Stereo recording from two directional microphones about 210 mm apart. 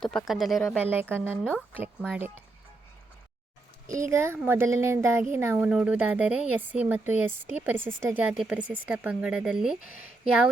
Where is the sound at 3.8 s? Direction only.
15° right (ahead or behind).